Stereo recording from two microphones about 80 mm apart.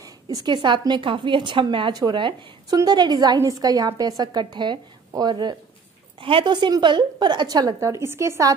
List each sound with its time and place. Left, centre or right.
0.0 s a woman's voice: right
2.7 s a woman's voice: right
3.4 s a woman's voice: right
4.2 s a woman's voice: right
5.1 s a woman's voice: right
6.2 s a woman's voice: right
7.8 s a woman's voice: right